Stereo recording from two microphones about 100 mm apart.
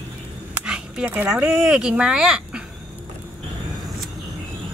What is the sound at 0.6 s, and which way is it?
Speech, 10° right (ahead or behind).